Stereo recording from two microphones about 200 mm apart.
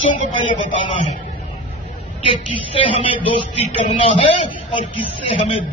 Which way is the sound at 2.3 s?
30° left (ahead or behind).